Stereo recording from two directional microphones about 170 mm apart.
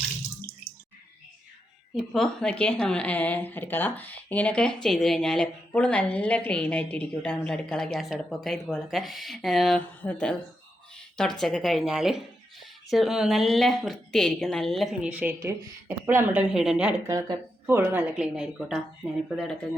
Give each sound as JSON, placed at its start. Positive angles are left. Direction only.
{"t": 2.0, "sound": "speech", "side_deg": 0}
{"t": 11.3, "sound": "speech", "side_deg": 0}
{"t": 17.1, "sound": "speech", "side_deg": -20}